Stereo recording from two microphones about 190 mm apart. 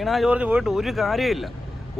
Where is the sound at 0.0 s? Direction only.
Centre (ahead or behind).